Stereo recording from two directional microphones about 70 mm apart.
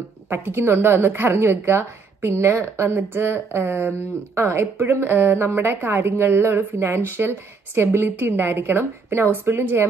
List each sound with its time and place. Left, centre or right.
0.3 s speech: right